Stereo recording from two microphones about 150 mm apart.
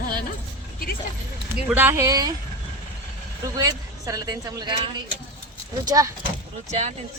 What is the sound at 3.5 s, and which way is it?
A woman's voice, 25° right (ahead or behind).